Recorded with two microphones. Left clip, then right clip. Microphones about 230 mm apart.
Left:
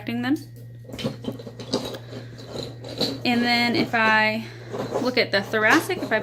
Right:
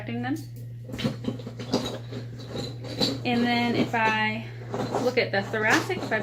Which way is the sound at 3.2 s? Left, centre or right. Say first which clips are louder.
Left 6 dB; left.